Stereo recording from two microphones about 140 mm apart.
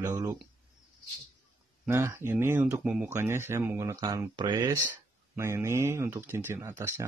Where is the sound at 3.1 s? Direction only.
20° right (ahead or behind).